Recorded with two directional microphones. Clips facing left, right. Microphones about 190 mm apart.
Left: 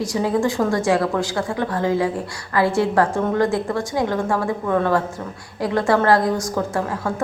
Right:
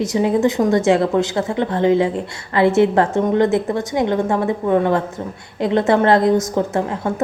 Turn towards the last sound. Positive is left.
turn(degrees=-20)  # may be behind; listen again after turning